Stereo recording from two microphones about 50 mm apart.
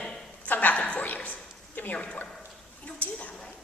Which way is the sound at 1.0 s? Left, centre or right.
Left.